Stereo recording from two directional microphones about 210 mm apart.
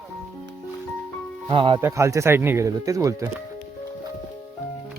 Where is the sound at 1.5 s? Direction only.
25° right (ahead or behind).